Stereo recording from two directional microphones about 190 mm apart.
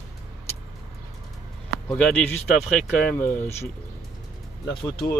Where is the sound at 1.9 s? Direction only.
5° left (ahead or behind).